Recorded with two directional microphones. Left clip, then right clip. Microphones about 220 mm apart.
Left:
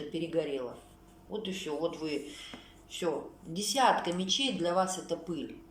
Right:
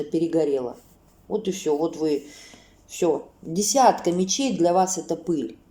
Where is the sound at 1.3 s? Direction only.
50° right (ahead or behind).